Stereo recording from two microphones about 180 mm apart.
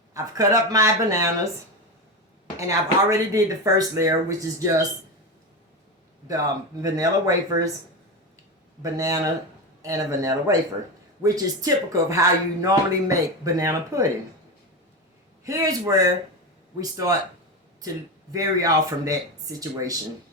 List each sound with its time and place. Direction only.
0.1 s speech: 20° right (ahead or behind)
2.6 s speech: 20° right (ahead or behind)
6.8 s speech: 20° right (ahead or behind)
8.8 s a man's voice: 20° right (ahead or behind)
15.4 s speech: 20° right (ahead or behind)
18.3 s speech: 20° right (ahead or behind)